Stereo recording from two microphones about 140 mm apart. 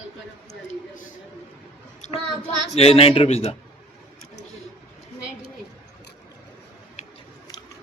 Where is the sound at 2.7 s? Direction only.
45° left (ahead or behind).